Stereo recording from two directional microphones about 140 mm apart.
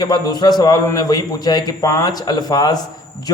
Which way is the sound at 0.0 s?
30° left (ahead or behind).